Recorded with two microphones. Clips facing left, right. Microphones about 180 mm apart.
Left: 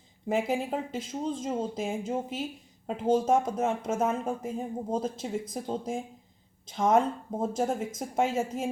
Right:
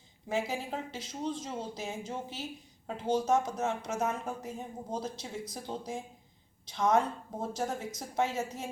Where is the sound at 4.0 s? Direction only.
30° left (ahead or behind).